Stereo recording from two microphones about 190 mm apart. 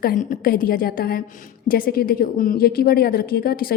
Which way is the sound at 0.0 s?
50° left (ahead or behind).